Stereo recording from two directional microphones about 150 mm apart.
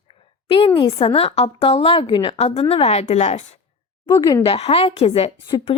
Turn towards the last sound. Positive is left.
turn(degrees=40)  # may be behind; listen again after turning